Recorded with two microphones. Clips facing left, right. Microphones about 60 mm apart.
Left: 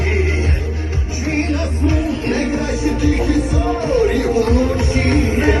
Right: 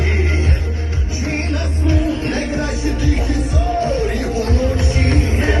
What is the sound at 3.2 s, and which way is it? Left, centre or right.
Music, left.